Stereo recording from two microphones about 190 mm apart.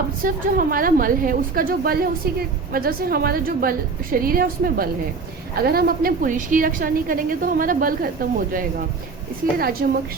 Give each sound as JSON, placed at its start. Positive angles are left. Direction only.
{"t": 0.2, "sound": "a woman's voice", "side_deg": -50}